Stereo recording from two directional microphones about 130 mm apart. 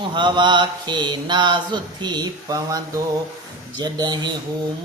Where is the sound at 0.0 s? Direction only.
35° right (ahead or behind).